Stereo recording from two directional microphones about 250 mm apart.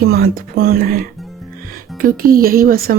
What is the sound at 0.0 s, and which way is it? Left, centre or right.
A woman's voice, right.